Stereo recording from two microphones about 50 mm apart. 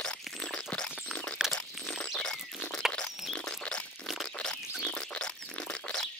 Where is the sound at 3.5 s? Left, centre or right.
Centre.